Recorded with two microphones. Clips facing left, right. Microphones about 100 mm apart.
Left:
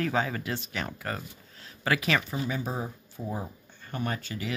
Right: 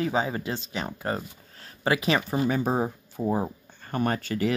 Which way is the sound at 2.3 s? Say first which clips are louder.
Right 7 dB; 50° right (ahead or behind).